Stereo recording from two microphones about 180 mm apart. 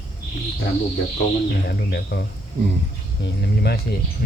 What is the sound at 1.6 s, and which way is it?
Speech, 65° left (ahead or behind).